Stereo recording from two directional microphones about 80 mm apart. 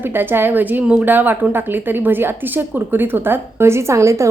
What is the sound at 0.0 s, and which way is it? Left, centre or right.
A woman's voice, right.